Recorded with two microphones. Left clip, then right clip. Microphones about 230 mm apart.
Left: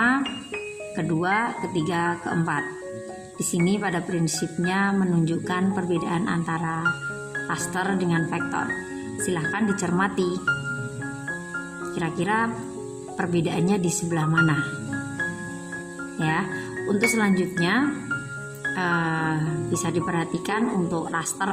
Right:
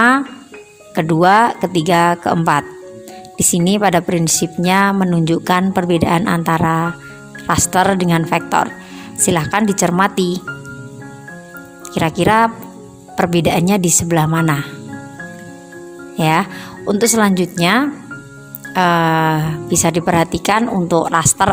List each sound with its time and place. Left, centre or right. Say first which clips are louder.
0.9 s speech: right 13 dB; right
11.9 s speech: right 12 dB; right
16.2 s speech: right 11 dB; right